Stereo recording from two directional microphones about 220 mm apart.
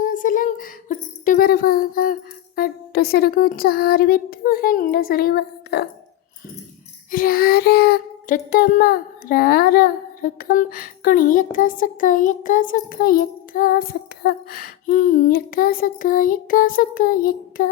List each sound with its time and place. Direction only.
0.0 s speech: 35° left (ahead or behind)
2.6 s music: 45° left (ahead or behind)
7.1 s child singing: 40° left (ahead or behind)